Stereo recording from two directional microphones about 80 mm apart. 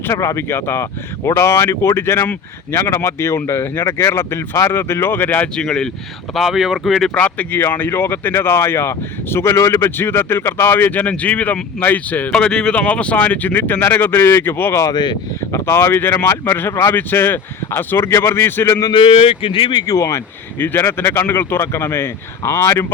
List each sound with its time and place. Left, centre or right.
0.1 s speech: left
5.5 s speech: centre
6.3 s speech: centre
7.1 s speech: centre
12.3 s speech: centre; by 18.8 s left
18.8 s speech: left
19.5 s speech: left
19.9 s speech: left
20.6 s speech: left